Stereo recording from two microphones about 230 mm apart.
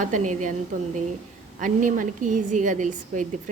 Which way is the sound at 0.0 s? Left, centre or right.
Right.